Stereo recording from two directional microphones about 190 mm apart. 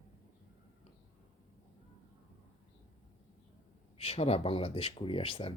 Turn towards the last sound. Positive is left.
turn(degrees=30)  # may be behind; listen again after turning